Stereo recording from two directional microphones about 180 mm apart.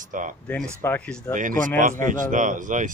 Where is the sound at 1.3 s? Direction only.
45° right (ahead or behind).